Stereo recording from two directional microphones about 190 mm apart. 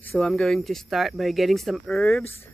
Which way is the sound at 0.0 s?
Centre (ahead or behind).